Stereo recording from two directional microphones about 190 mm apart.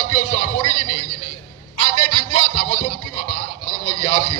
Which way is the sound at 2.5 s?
40° left (ahead or behind).